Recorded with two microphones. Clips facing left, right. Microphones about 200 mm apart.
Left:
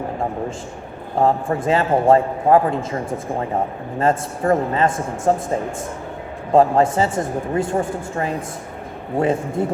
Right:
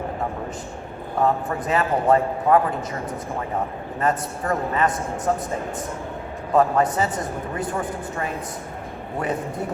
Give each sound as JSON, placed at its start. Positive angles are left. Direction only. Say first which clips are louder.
{"t": 1.2, "sound": "a man's voice", "louder": "left 4 dB", "side_deg": 25}
{"t": 6.5, "sound": "a man's voice", "louder": "left 4 dB", "side_deg": 25}